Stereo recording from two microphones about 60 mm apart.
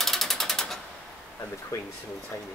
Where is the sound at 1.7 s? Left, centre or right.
Left.